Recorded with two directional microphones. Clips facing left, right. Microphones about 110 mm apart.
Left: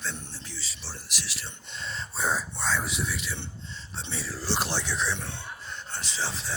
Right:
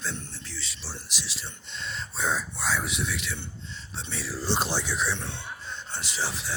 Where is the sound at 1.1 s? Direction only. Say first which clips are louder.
Left 2 dB; 20° right (ahead or behind).